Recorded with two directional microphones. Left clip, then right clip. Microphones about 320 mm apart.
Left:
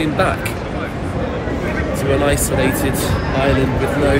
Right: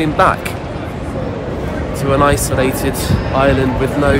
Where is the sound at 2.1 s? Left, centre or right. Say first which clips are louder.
Right 5 dB; centre.